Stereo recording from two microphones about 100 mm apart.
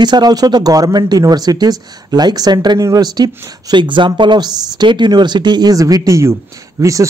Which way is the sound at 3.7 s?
50° right (ahead or behind).